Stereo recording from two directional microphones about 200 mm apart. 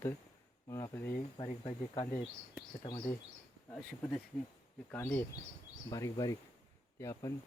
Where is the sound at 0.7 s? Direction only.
15° left (ahead or behind).